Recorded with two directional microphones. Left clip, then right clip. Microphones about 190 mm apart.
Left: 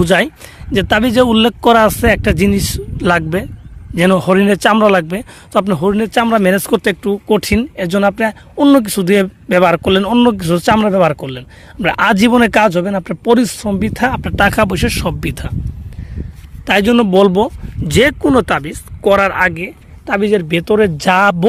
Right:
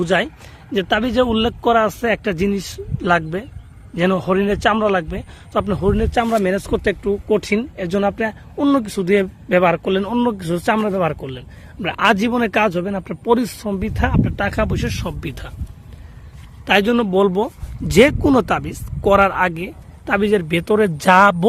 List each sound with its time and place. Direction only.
0.0 s a man's voice: 65° left (ahead or behind)
16.6 s a man's voice: 50° left (ahead or behind)
17.8 s speech: 15° left (ahead or behind)
20.1 s speech: 20° left (ahead or behind)